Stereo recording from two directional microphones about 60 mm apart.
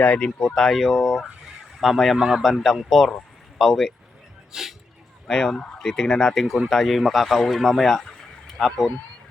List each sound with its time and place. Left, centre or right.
0.0 s speech: centre
0.3 s a man's voice: centre
4.5 s speech: centre
5.3 s a man's voice: centre